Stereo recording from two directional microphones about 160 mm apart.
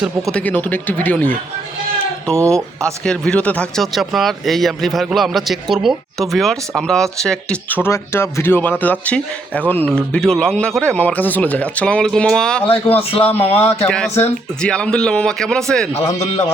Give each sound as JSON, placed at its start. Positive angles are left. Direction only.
{"t": 0.0, "sound": "speech", "side_deg": 0}
{"t": 12.9, "sound": "a man's voice", "side_deg": 40}
{"t": 13.3, "sound": "speech", "side_deg": 15}